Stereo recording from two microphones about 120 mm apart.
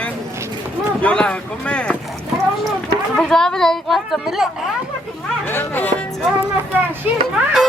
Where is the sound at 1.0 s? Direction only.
10° left (ahead or behind).